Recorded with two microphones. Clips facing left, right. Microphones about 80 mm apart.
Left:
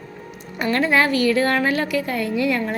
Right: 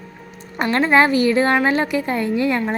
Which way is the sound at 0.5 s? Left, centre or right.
Right.